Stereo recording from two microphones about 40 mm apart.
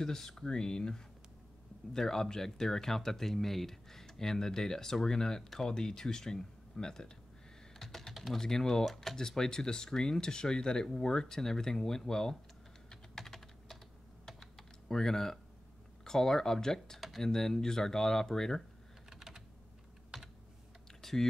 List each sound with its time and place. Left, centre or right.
0.0 s speech: centre
7.8 s typing: centre
8.4 s speech: centre
12.9 s typing: centre
16.0 s speech: centre
19.0 s computer keyboard: centre
21.0 s typing: centre